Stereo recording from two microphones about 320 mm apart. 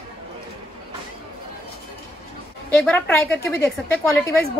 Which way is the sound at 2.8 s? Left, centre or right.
Centre.